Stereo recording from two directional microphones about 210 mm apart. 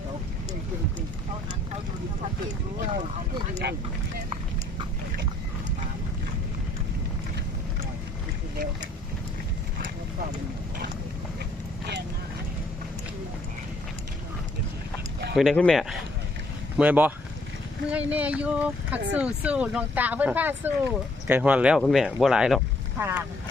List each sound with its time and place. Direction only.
3.6 s speech: 50° right (ahead or behind)
15.4 s speech: centre (ahead or behind)